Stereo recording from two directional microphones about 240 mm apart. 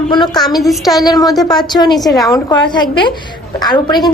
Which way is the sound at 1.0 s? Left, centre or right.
Centre.